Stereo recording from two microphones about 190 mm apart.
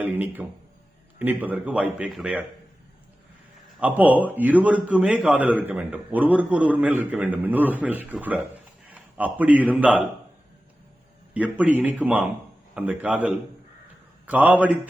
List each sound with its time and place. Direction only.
0.0 s a sound: 10° right (ahead or behind)
1.2 s a man's voice: 10° right (ahead or behind)
3.8 s a man's voice: 10° right (ahead or behind)
11.3 s a man's voice: 5° right (ahead or behind)